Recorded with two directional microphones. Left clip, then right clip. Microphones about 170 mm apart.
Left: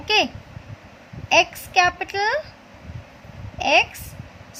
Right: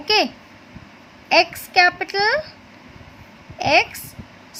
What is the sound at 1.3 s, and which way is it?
A woman's voice, 25° right (ahead or behind).